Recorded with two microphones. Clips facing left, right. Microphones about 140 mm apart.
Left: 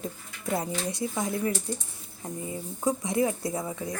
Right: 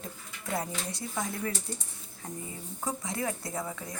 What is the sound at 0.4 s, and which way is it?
Speech, 20° left (ahead or behind).